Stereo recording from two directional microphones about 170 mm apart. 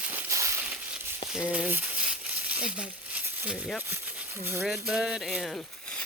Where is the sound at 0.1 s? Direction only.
15° right (ahead or behind).